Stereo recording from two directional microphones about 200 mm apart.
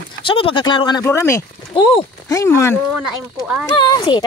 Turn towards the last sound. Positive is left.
turn(degrees=20)  # may be behind; listen again after turning